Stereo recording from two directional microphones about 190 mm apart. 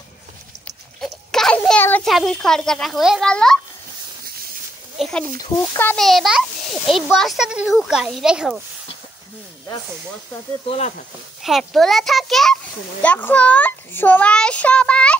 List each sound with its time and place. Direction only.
1.0 s a sound: centre (ahead or behind)
4.9 s a child's voice: centre (ahead or behind)
10.7 s speech: 35° left (ahead or behind)
11.4 s a child's voice: centre (ahead or behind)